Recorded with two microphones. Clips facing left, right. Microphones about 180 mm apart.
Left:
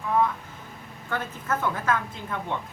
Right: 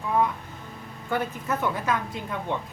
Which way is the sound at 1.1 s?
15° right (ahead or behind).